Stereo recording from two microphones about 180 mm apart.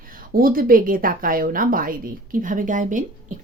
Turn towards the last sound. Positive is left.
turn(degrees=-45)  # may be behind; listen again after turning